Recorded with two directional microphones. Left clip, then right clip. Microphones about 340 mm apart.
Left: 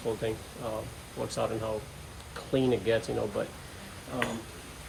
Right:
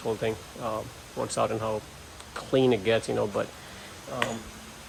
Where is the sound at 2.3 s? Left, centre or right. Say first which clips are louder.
Right 5 dB; centre.